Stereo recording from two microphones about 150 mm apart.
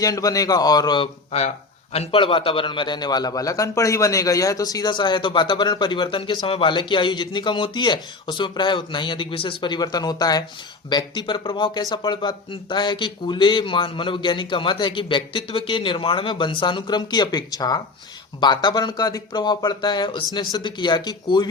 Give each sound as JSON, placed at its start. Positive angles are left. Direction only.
{"t": 0.0, "sound": "a man's voice", "side_deg": 25}